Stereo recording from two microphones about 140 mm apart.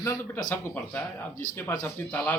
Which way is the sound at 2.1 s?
10° left (ahead or behind).